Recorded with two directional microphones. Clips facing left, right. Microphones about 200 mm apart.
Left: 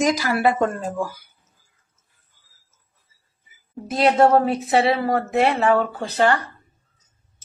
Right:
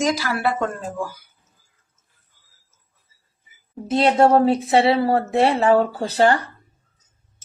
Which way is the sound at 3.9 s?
25° right (ahead or behind).